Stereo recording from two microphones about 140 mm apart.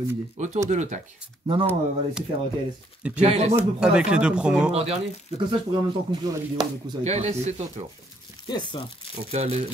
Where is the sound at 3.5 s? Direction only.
5° right (ahead or behind).